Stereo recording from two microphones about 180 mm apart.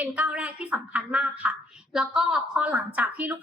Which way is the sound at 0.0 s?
10° right (ahead or behind).